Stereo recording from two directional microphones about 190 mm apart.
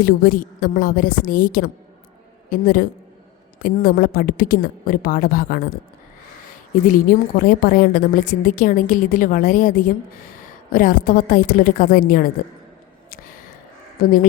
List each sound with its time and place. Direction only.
0.0 s a woman's voice: 50° left (ahead or behind)
6.8 s a woman's voice: 45° left (ahead or behind)
14.0 s a woman's voice: 50° left (ahead or behind)